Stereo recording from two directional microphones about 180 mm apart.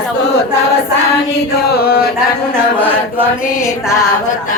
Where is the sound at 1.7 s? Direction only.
60° left (ahead or behind).